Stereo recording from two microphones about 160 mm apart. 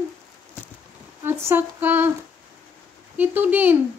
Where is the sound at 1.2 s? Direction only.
15° right (ahead or behind).